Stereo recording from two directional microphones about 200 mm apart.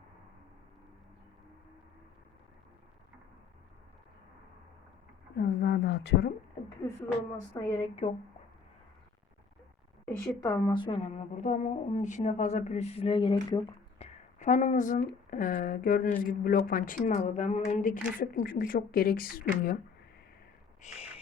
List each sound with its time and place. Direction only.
5.4 s a sound: 50° left (ahead or behind)
6.8 s speech: 15° left (ahead or behind)
10.1 s speech: 15° left (ahead or behind)
14.0 s speech: 35° left (ahead or behind)
20.8 s squawk: 35° left (ahead or behind)